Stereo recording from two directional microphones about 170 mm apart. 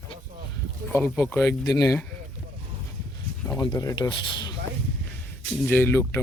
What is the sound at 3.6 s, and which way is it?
Speech, 25° left (ahead or behind).